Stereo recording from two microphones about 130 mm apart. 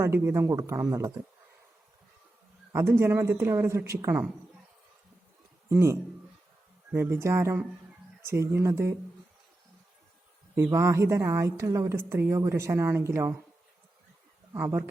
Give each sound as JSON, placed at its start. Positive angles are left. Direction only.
{"t": 0.0, "sound": "a woman's voice", "side_deg": -20}
{"t": 2.7, "sound": "a woman's voice", "side_deg": -20}
{"t": 5.6, "sound": "a woman's voice", "side_deg": -20}
{"t": 10.5, "sound": "a woman's voice", "side_deg": -15}
{"t": 14.5, "sound": "a woman's voice", "side_deg": -20}